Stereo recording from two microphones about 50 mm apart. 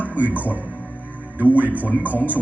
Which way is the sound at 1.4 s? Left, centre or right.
Right.